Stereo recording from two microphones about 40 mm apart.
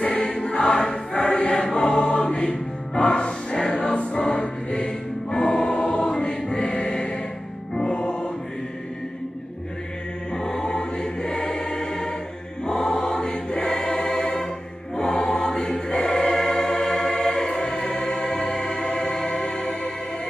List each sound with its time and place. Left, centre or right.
0.1 s choir: left
1.2 s choir: left
1.5 s choir: left
2.0 s music: left
10.3 s choir: centre
13.9 s music: centre
15.0 s choir: centre